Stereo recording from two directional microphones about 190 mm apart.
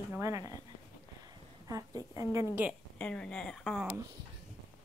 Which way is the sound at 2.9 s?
5° left (ahead or behind).